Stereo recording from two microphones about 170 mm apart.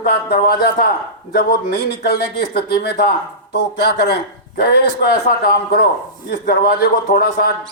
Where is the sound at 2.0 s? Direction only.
70° left (ahead or behind).